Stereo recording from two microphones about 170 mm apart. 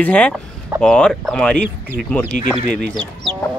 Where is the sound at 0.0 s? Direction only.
10° left (ahead or behind).